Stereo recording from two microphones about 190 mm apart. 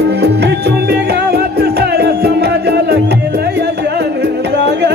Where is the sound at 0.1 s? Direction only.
60° right (ahead or behind).